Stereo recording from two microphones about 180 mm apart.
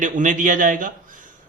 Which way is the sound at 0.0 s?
45° right (ahead or behind).